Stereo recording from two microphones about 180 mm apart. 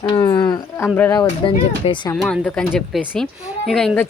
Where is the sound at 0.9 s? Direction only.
15° left (ahead or behind).